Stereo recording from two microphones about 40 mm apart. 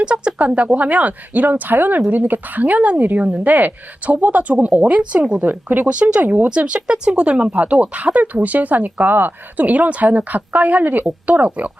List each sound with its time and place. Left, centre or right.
0.0 s speech: right
5.4 s speech: right
5.8 s speech: right
6.2 s speech: right
6.5 s speech: right
9.6 s speech: right